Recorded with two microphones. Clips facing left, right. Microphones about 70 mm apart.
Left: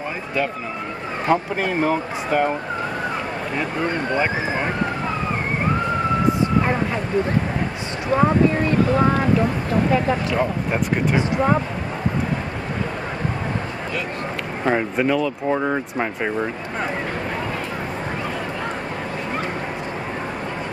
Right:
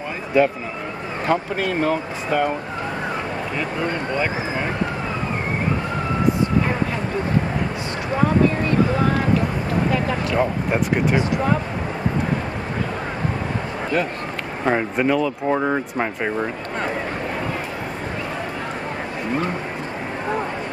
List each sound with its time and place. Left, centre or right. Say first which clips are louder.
0.3 s speech: right 7 dB; centre
1.3 s speech: left 1 dB; centre
10.3 s speech: right 1 dB; centre
14.6 s speech: even; centre